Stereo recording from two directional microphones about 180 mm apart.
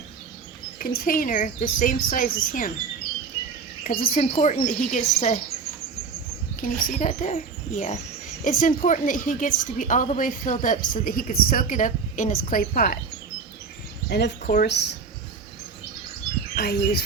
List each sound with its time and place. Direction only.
0.8 s a woman's voice: 50° left (ahead or behind)
3.8 s a woman's voice: 50° left (ahead or behind)
6.6 s a woman's voice: 50° left (ahead or behind)
14.1 s speech: 70° left (ahead or behind)
16.6 s speech: 60° left (ahead or behind)